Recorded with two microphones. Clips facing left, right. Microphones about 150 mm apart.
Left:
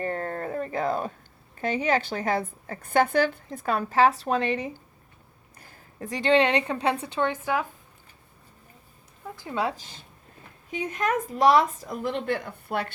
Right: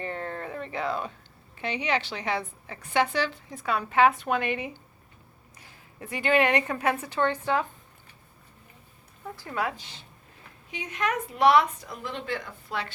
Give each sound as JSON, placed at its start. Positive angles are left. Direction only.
{"t": 0.0, "sound": "a sound", "side_deg": 40}
{"t": 1.5, "sound": "a woman's voice", "side_deg": 45}
{"t": 5.5, "sound": "a sound", "side_deg": 45}
{"t": 6.3, "sound": "a woman's voice", "side_deg": 25}
{"t": 7.2, "sound": "speech", "side_deg": 10}
{"t": 9.3, "sound": "speech", "side_deg": 20}
{"t": 10.7, "sound": "a woman's voice", "side_deg": 45}